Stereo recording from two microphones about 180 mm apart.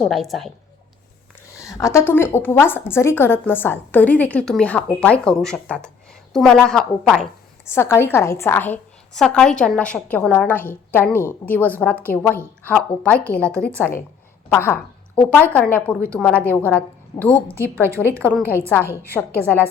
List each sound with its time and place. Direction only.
0.0 s a woman's voice: centre (ahead or behind)
1.5 s a woman's voice: 15° left (ahead or behind); by 7.7 s centre (ahead or behind)
7.7 s a woman's voice: 15° left (ahead or behind)
14.5 s a woman's voice: 10° left (ahead or behind)
17.5 s a woman's voice: 15° right (ahead or behind)
18.2 s a woman's voice: 10° left (ahead or behind)